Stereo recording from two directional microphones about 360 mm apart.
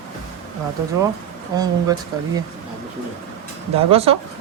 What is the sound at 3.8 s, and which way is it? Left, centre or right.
Speech, centre.